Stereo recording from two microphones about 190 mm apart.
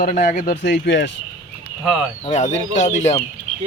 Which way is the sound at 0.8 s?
70° left (ahead or behind).